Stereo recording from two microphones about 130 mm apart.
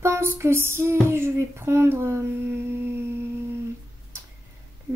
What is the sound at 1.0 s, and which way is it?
Speech, 20° right (ahead or behind).